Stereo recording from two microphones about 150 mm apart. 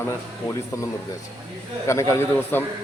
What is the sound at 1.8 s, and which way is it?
Speech, 20° left (ahead or behind).